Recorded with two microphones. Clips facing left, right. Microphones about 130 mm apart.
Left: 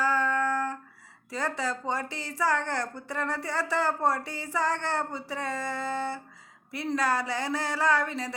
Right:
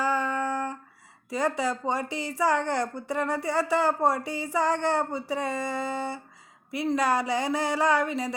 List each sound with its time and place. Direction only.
0.0 s music: 15° right (ahead or behind)
1.3 s a woman's voice: 15° right (ahead or behind)